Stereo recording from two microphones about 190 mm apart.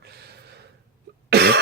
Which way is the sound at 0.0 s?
55° right (ahead or behind).